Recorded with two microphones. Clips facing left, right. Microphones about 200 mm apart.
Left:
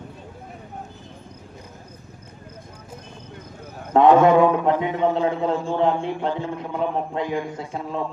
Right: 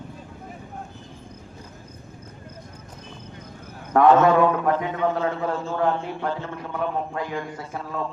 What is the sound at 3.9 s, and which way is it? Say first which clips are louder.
A man's voice: left 2 dB; 20° left (ahead or behind).